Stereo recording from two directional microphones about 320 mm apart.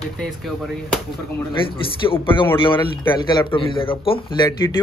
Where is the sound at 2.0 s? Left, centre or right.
Centre.